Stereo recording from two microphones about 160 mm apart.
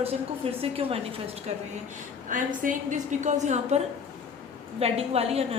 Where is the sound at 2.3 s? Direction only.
55° right (ahead or behind).